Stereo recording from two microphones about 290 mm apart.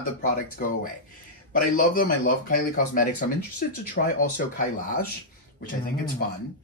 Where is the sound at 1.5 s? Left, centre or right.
Left.